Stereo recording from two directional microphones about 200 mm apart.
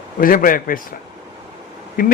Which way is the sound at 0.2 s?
45° left (ahead or behind).